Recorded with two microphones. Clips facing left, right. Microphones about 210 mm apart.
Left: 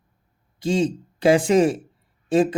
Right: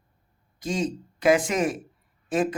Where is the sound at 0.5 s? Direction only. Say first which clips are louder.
Left 6 dB; 30° left (ahead or behind).